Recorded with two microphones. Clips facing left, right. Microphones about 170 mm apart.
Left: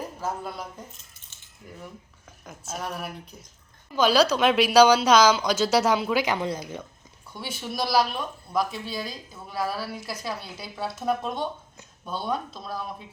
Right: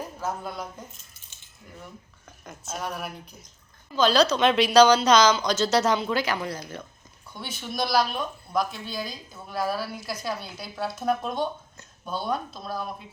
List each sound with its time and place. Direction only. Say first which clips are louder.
0.2 s speech: right 1 dB; 5° left (ahead or behind)
2.4 s a woman's voice: right 1 dB; 5° left (ahead or behind)
6.2 s a woman's voice: left 2 dB; 20° left (ahead or behind)
7.3 s speech: even; 5° left (ahead or behind)